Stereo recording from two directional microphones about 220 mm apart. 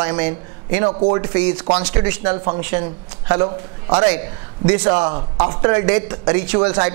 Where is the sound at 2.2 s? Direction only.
25° right (ahead or behind).